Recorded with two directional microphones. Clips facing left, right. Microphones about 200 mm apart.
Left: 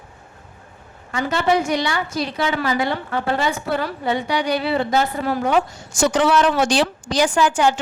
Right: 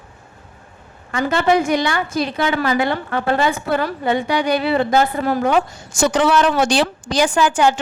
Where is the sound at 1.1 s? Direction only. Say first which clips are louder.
Right 3 dB; 55° right (ahead or behind).